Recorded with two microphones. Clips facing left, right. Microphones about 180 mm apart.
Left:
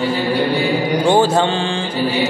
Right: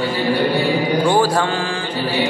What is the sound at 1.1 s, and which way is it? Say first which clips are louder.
Mantra: left 6 dB; 25° left (ahead or behind).